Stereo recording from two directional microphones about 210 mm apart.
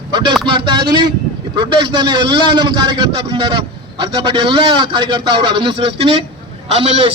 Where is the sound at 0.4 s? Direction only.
25° right (ahead or behind).